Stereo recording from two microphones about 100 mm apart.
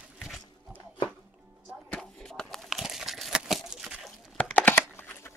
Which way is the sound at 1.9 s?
5° left (ahead or behind).